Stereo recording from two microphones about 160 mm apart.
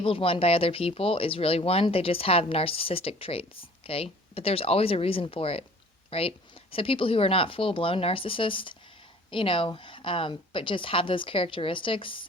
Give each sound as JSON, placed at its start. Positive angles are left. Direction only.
{"t": 0.0, "sound": "speech", "side_deg": 35}